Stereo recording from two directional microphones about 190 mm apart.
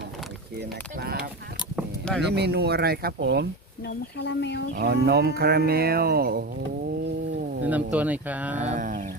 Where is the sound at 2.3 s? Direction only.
60° right (ahead or behind).